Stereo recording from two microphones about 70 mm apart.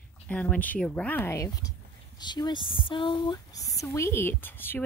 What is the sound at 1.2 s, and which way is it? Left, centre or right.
Speech, left.